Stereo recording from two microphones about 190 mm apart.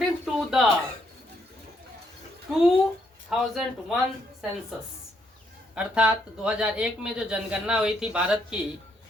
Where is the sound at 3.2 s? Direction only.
Centre (ahead or behind).